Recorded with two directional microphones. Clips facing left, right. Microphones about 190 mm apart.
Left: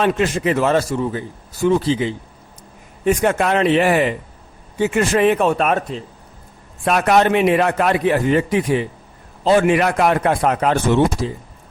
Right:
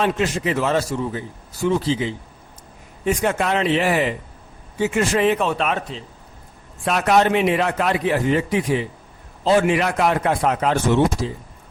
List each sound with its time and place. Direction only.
0.0 s a man's voice: 55° left (ahead or behind)